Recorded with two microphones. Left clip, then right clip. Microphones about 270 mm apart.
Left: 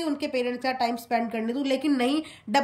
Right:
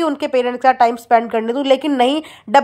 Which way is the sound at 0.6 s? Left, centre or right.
Right.